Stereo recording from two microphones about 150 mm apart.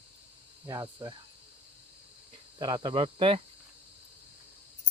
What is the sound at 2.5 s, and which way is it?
Speech, 30° right (ahead or behind).